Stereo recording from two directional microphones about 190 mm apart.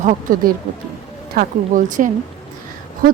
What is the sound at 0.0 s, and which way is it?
A woman's voice, 40° right (ahead or behind).